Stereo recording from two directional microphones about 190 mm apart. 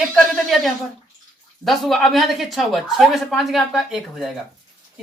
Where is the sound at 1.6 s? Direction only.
Centre (ahead or behind).